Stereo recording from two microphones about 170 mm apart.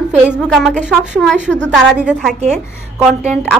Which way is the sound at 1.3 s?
90° right.